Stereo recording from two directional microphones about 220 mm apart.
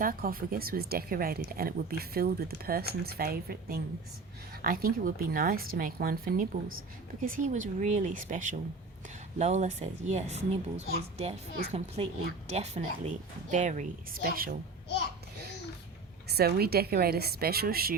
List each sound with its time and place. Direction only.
0.0 s speech: 40° right (ahead or behind)
16.3 s speech: 45° right (ahead or behind)